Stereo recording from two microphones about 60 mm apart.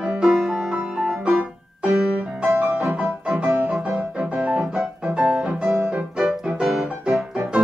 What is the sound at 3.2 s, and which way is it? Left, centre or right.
Music, centre.